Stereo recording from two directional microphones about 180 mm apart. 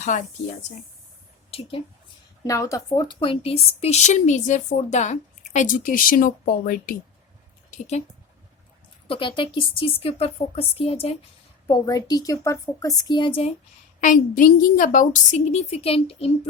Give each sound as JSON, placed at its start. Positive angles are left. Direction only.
{"t": 1.5, "sound": "a woman's voice", "side_deg": 30}
{"t": 2.4, "sound": "speech", "side_deg": 20}
{"t": 7.7, "sound": "speech", "side_deg": 40}
{"t": 9.0, "sound": "speech", "side_deg": 30}
{"t": 11.7, "sound": "a woman's voice", "side_deg": 20}
{"t": 14.0, "sound": "speech", "side_deg": 45}